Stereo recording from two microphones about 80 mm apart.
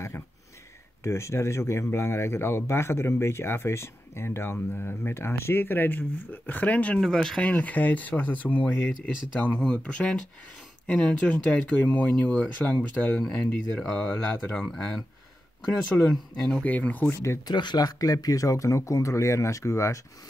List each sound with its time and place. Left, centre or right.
1.0 s speech: left; by 7.0 s centre
7.0 s speech: centre
7.4 s speech: centre
15.9 s speech: left
16.3 s speech: centre
16.6 s speech: centre
17.1 s speech: left
17.5 s speech: left